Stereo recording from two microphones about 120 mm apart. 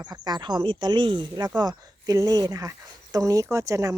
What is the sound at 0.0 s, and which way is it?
Speech, 35° right (ahead or behind).